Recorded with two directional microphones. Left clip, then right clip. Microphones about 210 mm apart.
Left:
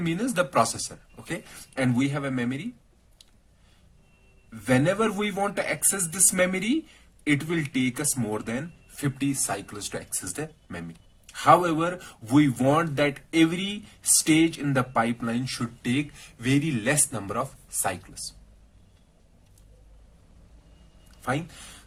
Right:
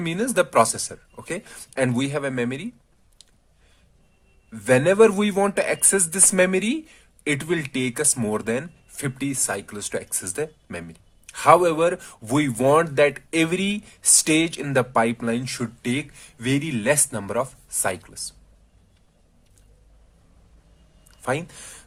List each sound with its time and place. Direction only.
0.0 s speech: 45° right (ahead or behind)
4.6 s speech: 45° right (ahead or behind)